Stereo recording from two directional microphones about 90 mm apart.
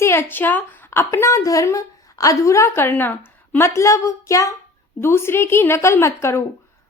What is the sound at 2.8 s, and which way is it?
Speech, 20° left (ahead or behind).